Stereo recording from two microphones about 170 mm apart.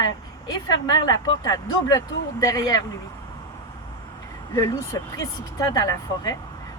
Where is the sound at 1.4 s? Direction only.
20° left (ahead or behind).